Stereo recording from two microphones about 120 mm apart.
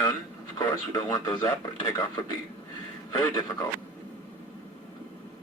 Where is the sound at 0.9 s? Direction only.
25° left (ahead or behind).